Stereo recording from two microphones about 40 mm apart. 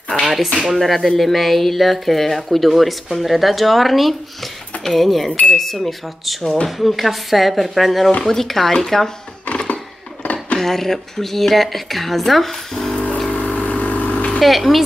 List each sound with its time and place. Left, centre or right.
0.7 s speech: centre
9.5 s a sound: left
10.2 s dishes: left
10.6 s speech: centre
12.9 s a sound: left
13.3 s vehicle: left
14.4 s speech: centre